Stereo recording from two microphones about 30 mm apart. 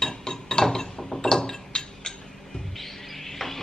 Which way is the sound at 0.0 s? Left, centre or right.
Left.